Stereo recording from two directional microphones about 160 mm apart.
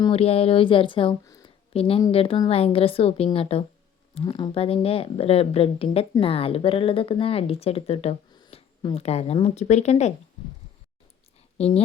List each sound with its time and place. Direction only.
0.0 s a woman's voice: 40° left (ahead or behind)